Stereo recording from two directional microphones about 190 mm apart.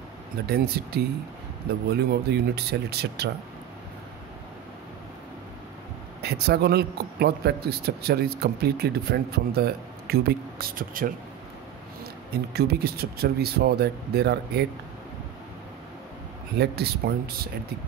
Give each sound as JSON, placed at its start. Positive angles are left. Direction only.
{"t": 0.5, "sound": "a man's voice", "side_deg": -55}
{"t": 6.2, "sound": "a man's voice", "side_deg": -55}
{"t": 12.3, "sound": "a man's voice", "side_deg": -55}
{"t": 16.5, "sound": "a man's voice", "side_deg": -55}